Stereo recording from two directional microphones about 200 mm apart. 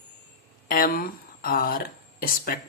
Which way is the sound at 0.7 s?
45° left (ahead or behind).